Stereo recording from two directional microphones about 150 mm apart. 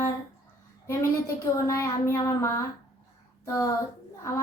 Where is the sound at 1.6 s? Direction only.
20° left (ahead or behind).